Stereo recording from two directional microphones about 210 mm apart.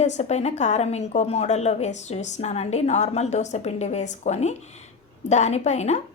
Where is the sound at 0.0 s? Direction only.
30° left (ahead or behind).